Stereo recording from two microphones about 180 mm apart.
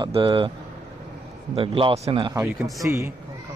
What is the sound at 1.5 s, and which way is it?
A man's voice, 30° right (ahead or behind).